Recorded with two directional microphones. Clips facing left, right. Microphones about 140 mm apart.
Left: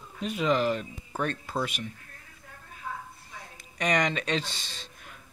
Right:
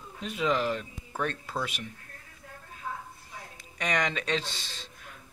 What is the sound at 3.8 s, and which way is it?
Speech, centre (ahead or behind).